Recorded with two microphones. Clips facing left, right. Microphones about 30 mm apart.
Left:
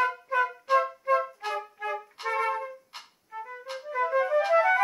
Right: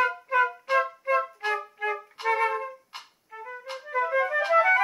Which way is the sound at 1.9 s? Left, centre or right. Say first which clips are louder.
Right 3 dB; centre.